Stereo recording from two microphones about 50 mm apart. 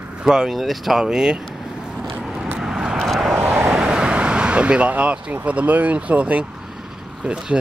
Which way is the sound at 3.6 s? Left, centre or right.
Centre.